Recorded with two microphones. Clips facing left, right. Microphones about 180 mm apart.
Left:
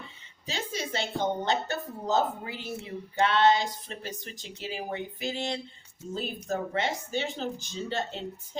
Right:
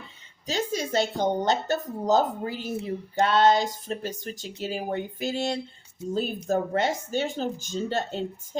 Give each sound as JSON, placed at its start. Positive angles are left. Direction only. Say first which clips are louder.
{"t": 0.4, "sound": "a woman's voice", "louder": "right 6 dB", "side_deg": -40}